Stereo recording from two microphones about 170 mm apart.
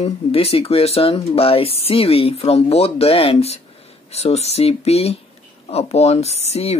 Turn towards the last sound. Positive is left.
turn(degrees=35)  # may be behind; listen again after turning